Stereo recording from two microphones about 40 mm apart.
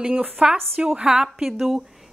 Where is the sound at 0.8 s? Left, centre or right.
Centre.